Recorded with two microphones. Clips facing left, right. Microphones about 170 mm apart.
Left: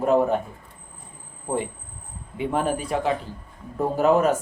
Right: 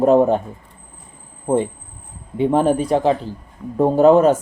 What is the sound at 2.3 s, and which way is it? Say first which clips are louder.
A man's voice: right 8 dB; 30° right (ahead or behind).